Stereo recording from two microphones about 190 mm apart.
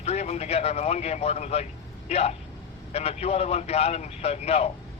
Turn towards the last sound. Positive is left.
turn(degrees=35)  # may be behind; listen again after turning